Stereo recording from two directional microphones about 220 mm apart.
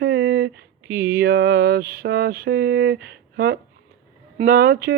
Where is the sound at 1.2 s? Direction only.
45° right (ahead or behind).